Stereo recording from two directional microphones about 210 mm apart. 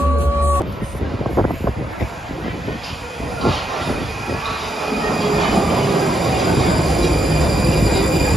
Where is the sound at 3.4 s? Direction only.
Centre (ahead or behind).